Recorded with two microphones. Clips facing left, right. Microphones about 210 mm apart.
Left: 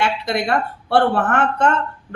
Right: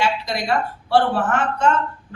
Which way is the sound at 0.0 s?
60° left (ahead or behind).